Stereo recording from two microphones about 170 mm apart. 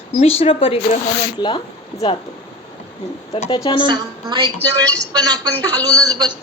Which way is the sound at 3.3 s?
35° left (ahead or behind).